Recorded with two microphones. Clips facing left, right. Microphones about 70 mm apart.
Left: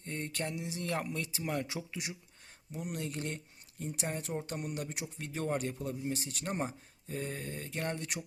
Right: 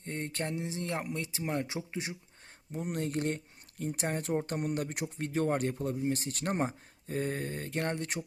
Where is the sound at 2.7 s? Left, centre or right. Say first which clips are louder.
Right 4 dB; right.